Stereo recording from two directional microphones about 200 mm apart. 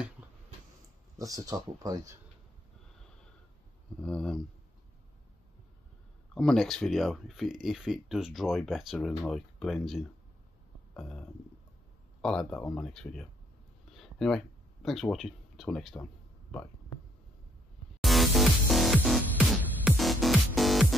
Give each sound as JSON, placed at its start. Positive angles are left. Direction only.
{"t": 1.1, "sound": "speech", "side_deg": -15}
{"t": 4.0, "sound": "speech", "side_deg": 5}
{"t": 6.3, "sound": "speech", "side_deg": 5}
{"t": 13.8, "sound": "a sound", "side_deg": 0}
{"t": 18.0, "sound": "music", "side_deg": 0}